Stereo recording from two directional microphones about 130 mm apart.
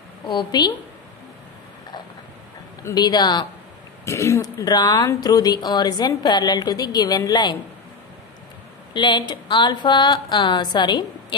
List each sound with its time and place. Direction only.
0.3 s speech: 35° left (ahead or behind)
2.8 s speech: 30° left (ahead or behind)
4.0 s speech: 20° left (ahead or behind)
8.9 s speech: 35° left (ahead or behind)